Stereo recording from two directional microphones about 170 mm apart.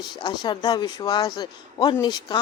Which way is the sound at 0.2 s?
25° left (ahead or behind).